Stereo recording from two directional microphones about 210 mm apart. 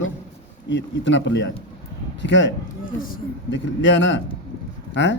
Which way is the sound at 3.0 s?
40° left (ahead or behind).